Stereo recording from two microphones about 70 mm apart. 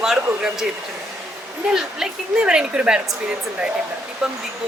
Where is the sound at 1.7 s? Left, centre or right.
Centre.